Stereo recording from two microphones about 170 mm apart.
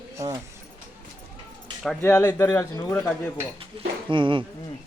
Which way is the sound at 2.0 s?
15° left (ahead or behind).